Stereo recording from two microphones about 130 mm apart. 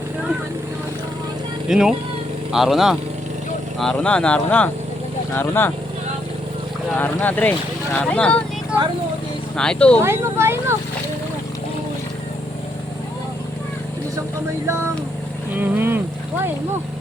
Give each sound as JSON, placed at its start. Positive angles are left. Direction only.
{"t": 1.6, "sound": "speech", "side_deg": -5}
{"t": 6.9, "sound": "speech", "side_deg": 10}
{"t": 9.6, "sound": "speech", "side_deg": 5}
{"t": 10.0, "sound": "speech", "side_deg": -20}
{"t": 15.5, "sound": "speech", "side_deg": -15}